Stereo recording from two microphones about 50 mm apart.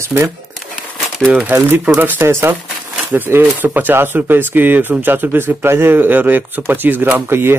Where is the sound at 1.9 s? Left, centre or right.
Right.